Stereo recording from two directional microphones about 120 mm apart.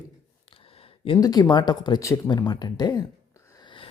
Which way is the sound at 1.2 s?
30° left (ahead or behind).